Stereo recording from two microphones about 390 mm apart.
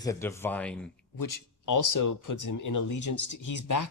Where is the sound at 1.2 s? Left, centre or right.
Left.